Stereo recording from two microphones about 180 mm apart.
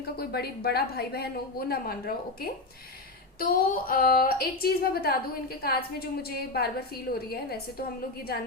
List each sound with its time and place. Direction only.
0.0 s a woman's voice: 60° left (ahead or behind)